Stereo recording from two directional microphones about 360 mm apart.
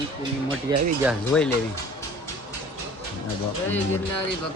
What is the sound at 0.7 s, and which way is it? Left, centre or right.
Speech, centre.